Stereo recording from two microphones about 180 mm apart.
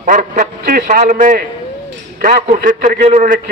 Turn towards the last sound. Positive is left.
turn(degrees=-45)  # may be behind; listen again after turning